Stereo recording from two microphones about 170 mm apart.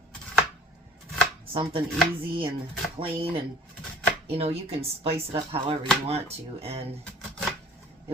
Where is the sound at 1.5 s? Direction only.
30° right (ahead or behind).